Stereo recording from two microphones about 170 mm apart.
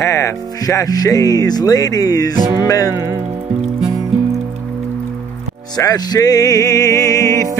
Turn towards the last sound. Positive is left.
turn(degrees=20)  # may be behind; listen again after turning